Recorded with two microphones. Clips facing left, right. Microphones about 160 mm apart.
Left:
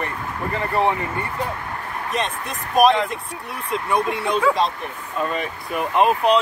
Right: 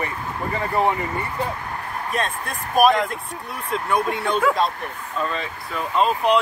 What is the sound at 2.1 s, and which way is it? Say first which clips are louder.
Speech: even; centre (ahead or behind).